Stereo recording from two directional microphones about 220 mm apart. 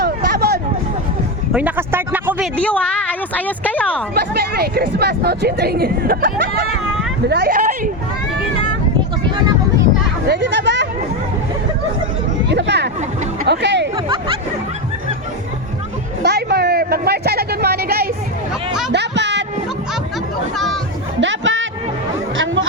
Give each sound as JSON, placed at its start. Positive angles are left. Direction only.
{"t": 0.0, "sound": "hubbub", "side_deg": -45}
{"t": 1.5, "sound": "speech", "side_deg": -10}
{"t": 2.6, "sound": "a woman's voice", "side_deg": 5}
{"t": 4.1, "sound": "speech", "side_deg": -45}
{"t": 10.2, "sound": "speech", "side_deg": -50}
{"t": 12.5, "sound": "speech", "side_deg": -50}
{"t": 13.4, "sound": "music", "side_deg": -50}
{"t": 13.9, "sound": "speech", "side_deg": -20}
{"t": 16.2, "sound": "a woman's voice", "side_deg": -50}
{"t": 18.9, "sound": "a sound", "side_deg": -50}
{"t": 21.2, "sound": "chatter", "side_deg": -55}